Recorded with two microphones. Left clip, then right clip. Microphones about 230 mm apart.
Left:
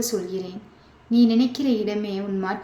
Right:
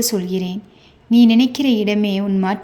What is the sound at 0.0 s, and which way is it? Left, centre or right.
A woman's voice, right.